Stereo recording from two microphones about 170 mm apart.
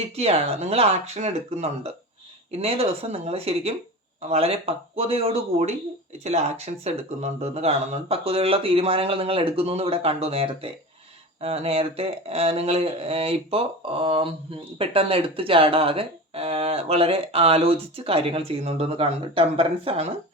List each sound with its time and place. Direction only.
0.2 s speech: 35° right (ahead or behind)